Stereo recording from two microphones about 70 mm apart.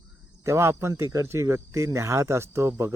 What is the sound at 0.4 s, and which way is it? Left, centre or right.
Speech, right.